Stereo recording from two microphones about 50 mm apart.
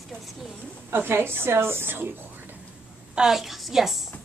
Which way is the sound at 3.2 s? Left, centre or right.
Centre.